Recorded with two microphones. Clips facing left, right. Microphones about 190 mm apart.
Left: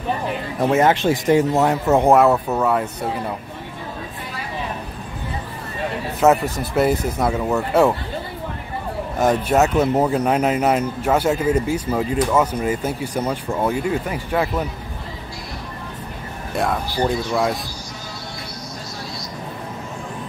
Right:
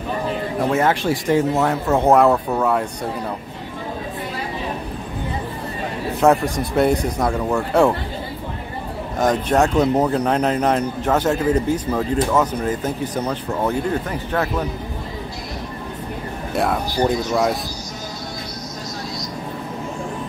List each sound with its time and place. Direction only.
0.7 s speech: 20° left (ahead or behind)
2.1 s speech: 5° left (ahead or behind)
6.2 s speech: 5° left (ahead or behind)
9.2 s speech: 10° left (ahead or behind)
16.5 s speech: centre (ahead or behind)